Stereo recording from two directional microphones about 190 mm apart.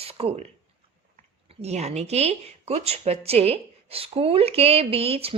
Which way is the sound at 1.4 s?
35° right (ahead or behind).